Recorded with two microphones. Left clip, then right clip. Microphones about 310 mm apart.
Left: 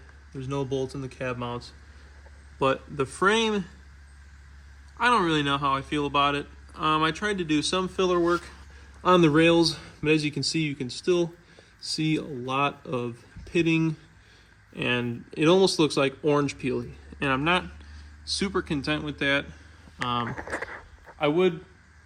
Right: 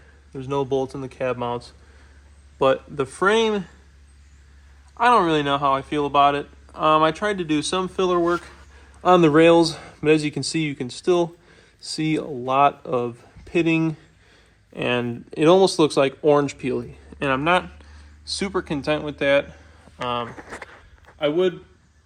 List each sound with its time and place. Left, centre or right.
0.3 s speech: centre
3.0 s speech: centre
4.9 s speech: centre
15.3 s a man's voice: centre
20.0 s speech: centre